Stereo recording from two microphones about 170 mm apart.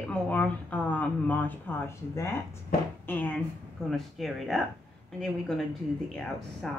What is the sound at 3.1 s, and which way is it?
Speech, 10° left (ahead or behind).